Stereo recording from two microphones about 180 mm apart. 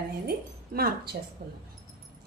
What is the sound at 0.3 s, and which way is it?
A woman's voice, 60° right (ahead or behind).